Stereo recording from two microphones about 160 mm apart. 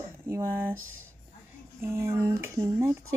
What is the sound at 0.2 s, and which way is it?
Speech, 15° right (ahead or behind).